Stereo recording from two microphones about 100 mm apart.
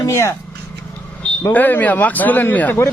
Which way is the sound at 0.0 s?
30° left (ahead or behind).